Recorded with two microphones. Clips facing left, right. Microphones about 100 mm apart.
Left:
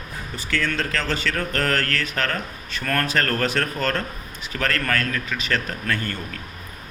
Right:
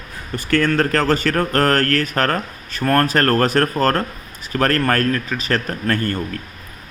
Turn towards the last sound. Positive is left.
turn(degrees=-45)  # may be behind; listen again after turning